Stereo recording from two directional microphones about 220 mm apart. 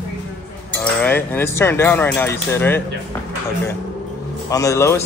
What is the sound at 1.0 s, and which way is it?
Speech, 10° left (ahead or behind).